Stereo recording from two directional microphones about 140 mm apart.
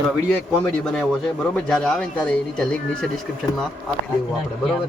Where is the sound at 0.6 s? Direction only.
5° left (ahead or behind).